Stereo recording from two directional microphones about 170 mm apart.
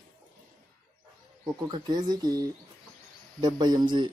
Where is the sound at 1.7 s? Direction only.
25° right (ahead or behind).